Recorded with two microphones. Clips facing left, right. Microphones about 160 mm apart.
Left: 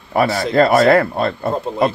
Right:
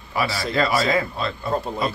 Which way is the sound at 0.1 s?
55° left (ahead or behind).